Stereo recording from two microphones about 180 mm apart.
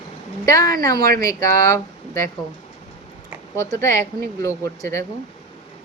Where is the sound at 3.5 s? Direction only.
15° left (ahead or behind).